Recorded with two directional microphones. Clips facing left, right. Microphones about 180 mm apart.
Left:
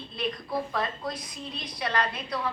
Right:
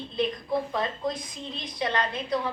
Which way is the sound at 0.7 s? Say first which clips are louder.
Right 2 dB; 20° right (ahead or behind).